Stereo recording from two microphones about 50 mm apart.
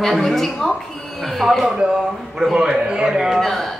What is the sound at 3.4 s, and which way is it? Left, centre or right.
Speech, centre.